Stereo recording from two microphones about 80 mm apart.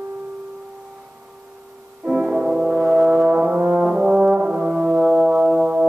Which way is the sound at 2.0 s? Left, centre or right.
Centre.